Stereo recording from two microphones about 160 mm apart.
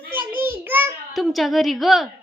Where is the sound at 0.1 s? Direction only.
15° right (ahead or behind).